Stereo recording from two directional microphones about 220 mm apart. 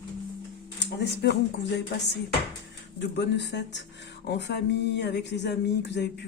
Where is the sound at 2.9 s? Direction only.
50° left (ahead or behind).